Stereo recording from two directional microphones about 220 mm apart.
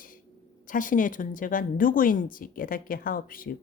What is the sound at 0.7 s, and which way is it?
Speech, 35° left (ahead or behind).